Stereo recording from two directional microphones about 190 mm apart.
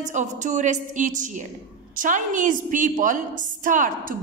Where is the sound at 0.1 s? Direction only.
40° right (ahead or behind).